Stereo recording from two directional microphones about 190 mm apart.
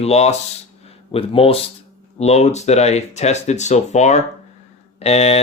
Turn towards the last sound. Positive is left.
turn(degrees=35)  # may be behind; listen again after turning